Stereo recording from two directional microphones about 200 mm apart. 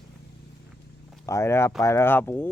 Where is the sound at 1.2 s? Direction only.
15° left (ahead or behind).